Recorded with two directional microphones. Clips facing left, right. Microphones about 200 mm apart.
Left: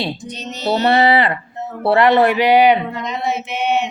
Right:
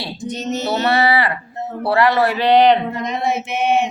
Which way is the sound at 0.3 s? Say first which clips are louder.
Right 7 dB; 45° right (ahead or behind).